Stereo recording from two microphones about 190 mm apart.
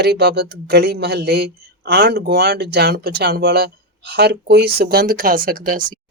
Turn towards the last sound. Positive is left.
turn(degrees=-45)  # may be behind; listen again after turning